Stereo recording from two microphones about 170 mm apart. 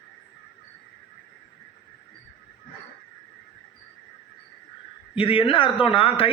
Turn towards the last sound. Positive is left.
turn(degrees=30)  # may be behind; listen again after turning